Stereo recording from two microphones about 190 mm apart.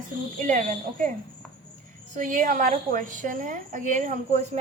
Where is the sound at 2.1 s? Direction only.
45° right (ahead or behind).